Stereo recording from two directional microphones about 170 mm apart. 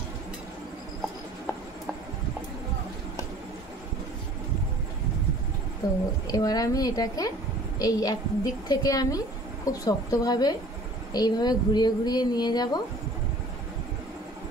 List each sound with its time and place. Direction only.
5.8 s a woman's voice: 20° left (ahead or behind)